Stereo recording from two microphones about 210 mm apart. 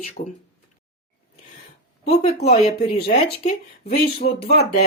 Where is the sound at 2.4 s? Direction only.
30° left (ahead or behind).